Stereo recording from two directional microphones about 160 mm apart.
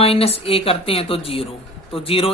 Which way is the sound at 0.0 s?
40° left (ahead or behind).